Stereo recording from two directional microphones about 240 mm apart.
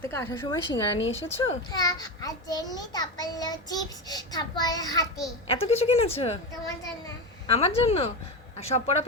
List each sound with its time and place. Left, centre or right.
0.0 s a child's voice: centre
5.5 s speech: left
7.4 s speech: left